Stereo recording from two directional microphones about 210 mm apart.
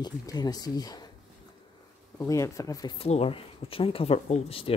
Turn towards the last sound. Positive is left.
turn(degrees=30)  # may be behind; listen again after turning